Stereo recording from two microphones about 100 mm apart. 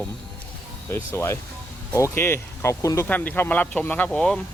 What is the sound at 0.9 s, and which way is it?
Speech, 25° left (ahead or behind).